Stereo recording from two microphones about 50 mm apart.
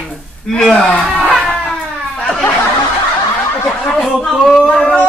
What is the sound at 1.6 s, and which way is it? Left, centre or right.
Crying, centre.